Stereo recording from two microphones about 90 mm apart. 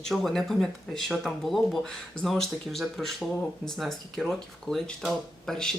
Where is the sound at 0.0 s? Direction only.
Centre (ahead or behind).